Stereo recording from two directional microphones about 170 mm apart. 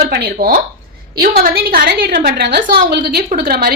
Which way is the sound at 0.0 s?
60° right (ahead or behind).